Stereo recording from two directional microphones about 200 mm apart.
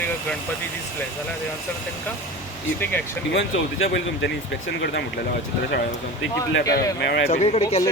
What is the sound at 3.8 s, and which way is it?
Speech, 60° left (ahead or behind).